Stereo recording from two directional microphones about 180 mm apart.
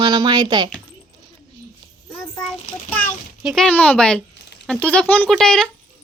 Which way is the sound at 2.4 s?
10° left (ahead or behind).